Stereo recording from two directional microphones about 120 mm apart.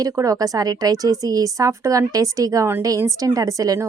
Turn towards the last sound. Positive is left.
turn(degrees=-30)  # may be behind; listen again after turning